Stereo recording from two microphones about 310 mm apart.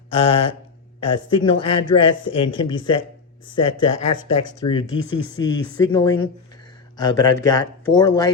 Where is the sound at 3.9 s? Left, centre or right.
Left.